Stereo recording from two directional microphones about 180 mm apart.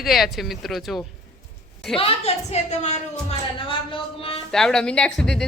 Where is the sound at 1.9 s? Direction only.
30° left (ahead or behind).